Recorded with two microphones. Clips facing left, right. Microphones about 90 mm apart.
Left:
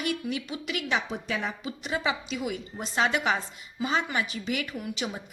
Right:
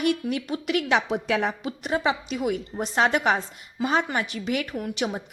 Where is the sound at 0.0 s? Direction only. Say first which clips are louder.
Right 6 dB; 55° right (ahead or behind).